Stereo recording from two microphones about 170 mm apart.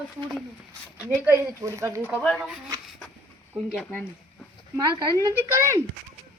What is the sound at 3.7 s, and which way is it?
Speech, 5° left (ahead or behind).